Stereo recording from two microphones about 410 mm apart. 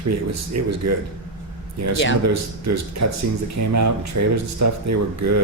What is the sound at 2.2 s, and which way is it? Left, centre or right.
Speech, right.